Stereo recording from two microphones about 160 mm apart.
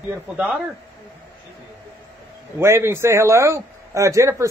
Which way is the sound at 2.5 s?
15° right (ahead or behind).